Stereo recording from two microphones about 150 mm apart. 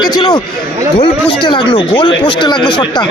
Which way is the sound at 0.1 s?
30° left (ahead or behind).